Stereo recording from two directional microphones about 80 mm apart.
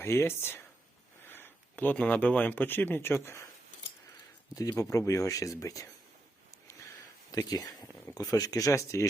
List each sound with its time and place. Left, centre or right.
0.0 s speech: left
4.8 s speech: left
7.3 s speech: left